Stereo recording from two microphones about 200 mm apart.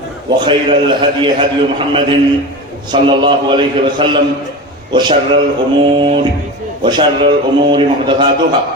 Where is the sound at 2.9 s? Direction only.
25° right (ahead or behind).